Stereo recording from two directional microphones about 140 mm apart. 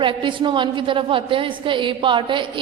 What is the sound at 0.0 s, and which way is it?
A woman's voice, 35° right (ahead or behind).